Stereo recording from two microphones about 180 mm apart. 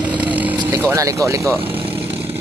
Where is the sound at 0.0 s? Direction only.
10° right (ahead or behind).